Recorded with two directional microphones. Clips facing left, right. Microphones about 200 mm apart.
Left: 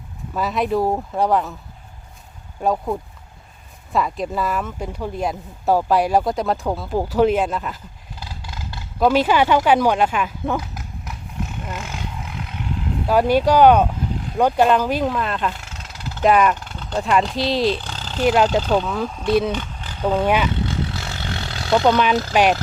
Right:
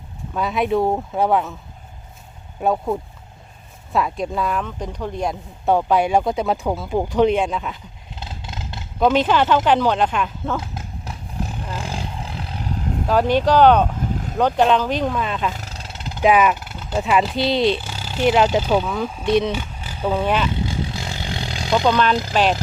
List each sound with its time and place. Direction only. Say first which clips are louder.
0.3 s speech: right 1 dB; centre (ahead or behind)
2.6 s speech: right 1 dB; centre (ahead or behind)
8.1 s roar: right 2 dB; 25° right (ahead or behind)
9.0 s speech: even; 5° left (ahead or behind)
10.6 s roar: right 2 dB; 30° right (ahead or behind)
13.1 s speech: left 1 dB; 10° left (ahead or behind)
14.1 s vehicle: right 1 dB; 45° right (ahead or behind)
14.3 s speech: left 1 dB; 10° left (ahead or behind)
15.5 s a sound: right 3 dB; 35° right (ahead or behind); by 16.2 s 20° right (ahead or behind)
16.2 s speech: even; 5° right (ahead or behind)
20.2 s speech: left 2 dB; 10° left (ahead or behind)
20.5 s roar: left 1 dB; 10° right (ahead or behind)
21.8 s speech: even; 15° left (ahead or behind)